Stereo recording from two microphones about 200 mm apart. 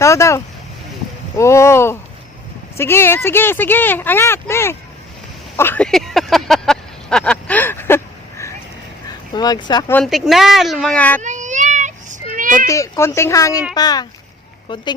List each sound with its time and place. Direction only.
0.0 s speech: 15° left (ahead or behind)
5.5 s a sound: 10° left (ahead or behind)
9.3 s speech: 20° left (ahead or behind)
9.9 s speech: centre (ahead or behind)
11.2 s child singing: 35° right (ahead or behind)
12.6 s speech: 15° left (ahead or behind)